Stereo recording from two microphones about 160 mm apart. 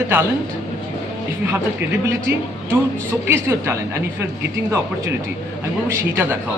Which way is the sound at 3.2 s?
15° right (ahead or behind).